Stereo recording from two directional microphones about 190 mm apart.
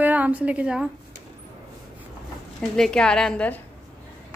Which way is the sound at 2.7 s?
5° left (ahead or behind).